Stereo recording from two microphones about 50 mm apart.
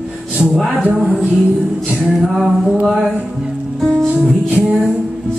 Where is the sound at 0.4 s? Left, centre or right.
Centre.